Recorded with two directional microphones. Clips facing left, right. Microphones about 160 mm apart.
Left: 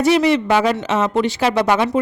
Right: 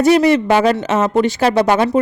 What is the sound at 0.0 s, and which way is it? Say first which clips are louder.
Speech: right 3 dB; 45° right (ahead or behind).